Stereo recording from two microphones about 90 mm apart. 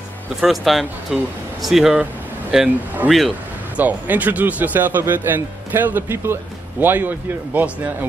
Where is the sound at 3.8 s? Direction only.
20° right (ahead or behind).